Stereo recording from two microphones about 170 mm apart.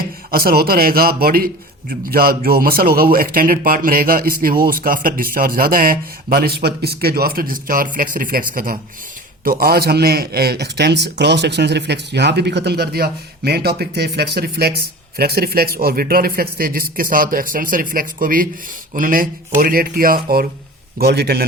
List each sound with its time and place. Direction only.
0.3 s a man's voice: 60° right (ahead or behind)